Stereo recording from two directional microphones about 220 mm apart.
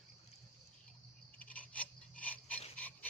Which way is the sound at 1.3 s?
5° left (ahead or behind).